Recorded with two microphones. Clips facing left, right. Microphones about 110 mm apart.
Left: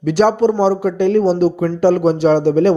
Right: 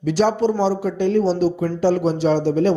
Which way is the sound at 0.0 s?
60° left (ahead or behind).